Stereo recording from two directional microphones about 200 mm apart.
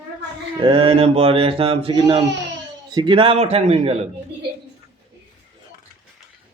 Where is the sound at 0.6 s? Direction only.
25° right (ahead or behind).